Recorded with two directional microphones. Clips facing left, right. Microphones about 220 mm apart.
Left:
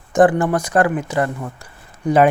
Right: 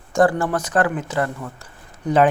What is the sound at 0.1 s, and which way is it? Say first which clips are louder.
Speech: left 4 dB; 20° left (ahead or behind).